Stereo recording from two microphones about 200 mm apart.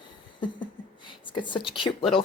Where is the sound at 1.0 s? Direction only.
25° left (ahead or behind).